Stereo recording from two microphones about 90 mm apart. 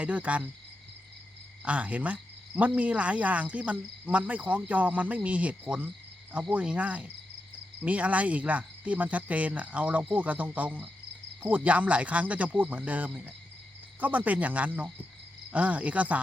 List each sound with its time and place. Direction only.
0.0 s cricket: 15° right (ahead or behind)
1.6 s cricket: 15° right (ahead or behind)